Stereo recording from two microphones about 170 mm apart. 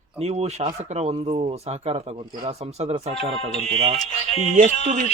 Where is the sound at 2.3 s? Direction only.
25° right (ahead or behind).